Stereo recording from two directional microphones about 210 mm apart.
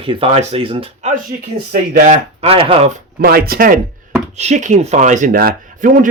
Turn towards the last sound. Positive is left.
turn(degrees=-40)  # may be behind; listen again after turning